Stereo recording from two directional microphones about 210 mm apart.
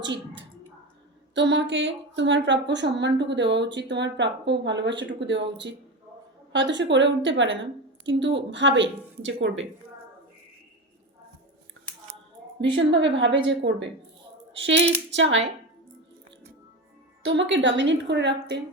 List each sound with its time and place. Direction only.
1.3 s speech: 60° right (ahead or behind)
12.7 s speech: 60° right (ahead or behind)
17.2 s speech: 60° right (ahead or behind)